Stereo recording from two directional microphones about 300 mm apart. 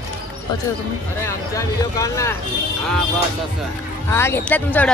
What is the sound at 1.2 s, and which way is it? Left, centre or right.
Speech, centre.